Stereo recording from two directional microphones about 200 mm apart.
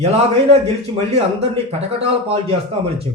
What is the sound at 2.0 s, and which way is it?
Speech, 30° right (ahead or behind).